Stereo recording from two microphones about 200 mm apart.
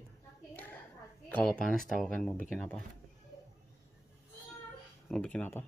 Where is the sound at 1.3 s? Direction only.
5° left (ahead or behind).